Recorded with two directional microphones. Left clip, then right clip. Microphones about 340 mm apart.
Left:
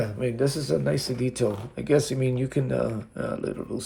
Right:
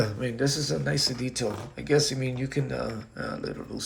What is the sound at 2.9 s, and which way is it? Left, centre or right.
Speech, left.